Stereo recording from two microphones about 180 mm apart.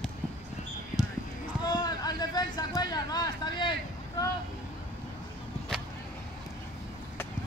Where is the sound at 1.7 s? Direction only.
25° left (ahead or behind).